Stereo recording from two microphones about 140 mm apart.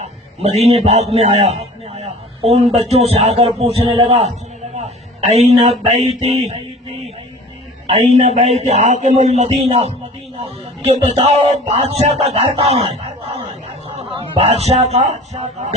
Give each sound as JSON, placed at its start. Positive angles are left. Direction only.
{"t": 0.0, "sound": "a man's voice", "side_deg": -50}
{"t": 5.3, "sound": "a man's voice", "side_deg": -50}
{"t": 7.9, "sound": "a man's voice", "side_deg": -50}
{"t": 14.2, "sound": "a man's voice", "side_deg": -45}